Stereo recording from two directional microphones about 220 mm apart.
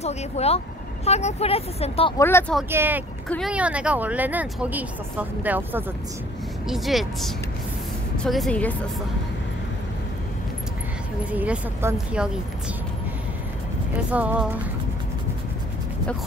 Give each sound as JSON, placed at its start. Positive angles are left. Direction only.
{"t": 0.0, "sound": "speech", "side_deg": 30}
{"t": 2.1, "sound": "speech", "side_deg": 10}
{"t": 2.7, "sound": "speech", "side_deg": -10}
{"t": 3.3, "sound": "speech", "side_deg": 0}
{"t": 11.3, "sound": "speech", "side_deg": -5}
{"t": 14.1, "sound": "speech", "side_deg": -5}